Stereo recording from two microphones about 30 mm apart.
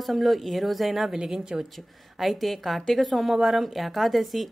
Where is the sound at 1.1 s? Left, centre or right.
Right.